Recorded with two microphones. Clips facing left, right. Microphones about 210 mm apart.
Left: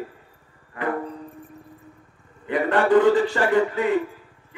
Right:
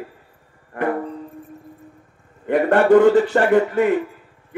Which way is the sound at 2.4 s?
50° right (ahead or behind).